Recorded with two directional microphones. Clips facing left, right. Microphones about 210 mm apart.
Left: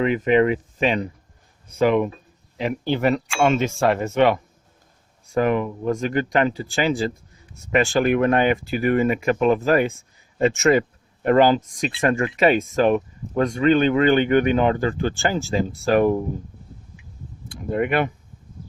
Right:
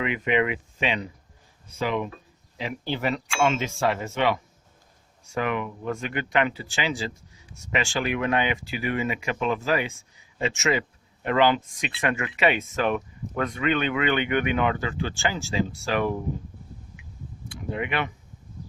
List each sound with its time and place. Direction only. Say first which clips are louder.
0.0 s speech: left 7 dB; 40° left (ahead or behind)
17.5 s speech: left 7 dB; 45° left (ahead or behind)